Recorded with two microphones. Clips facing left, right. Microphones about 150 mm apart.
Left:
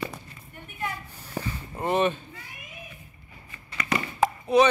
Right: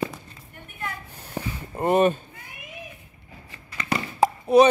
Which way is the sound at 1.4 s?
25° right (ahead or behind).